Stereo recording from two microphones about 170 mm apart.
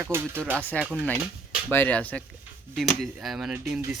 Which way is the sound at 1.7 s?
10° left (ahead or behind).